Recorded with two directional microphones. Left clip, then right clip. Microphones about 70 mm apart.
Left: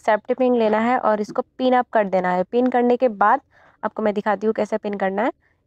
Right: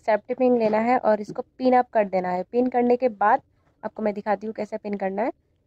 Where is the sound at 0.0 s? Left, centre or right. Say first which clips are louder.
Left 3 dB; left.